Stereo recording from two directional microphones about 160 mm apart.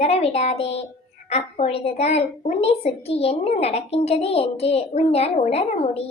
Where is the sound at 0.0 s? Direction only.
40° left (ahead or behind).